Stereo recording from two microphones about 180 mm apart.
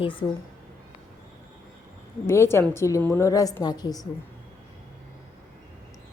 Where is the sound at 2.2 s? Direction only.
15° left (ahead or behind).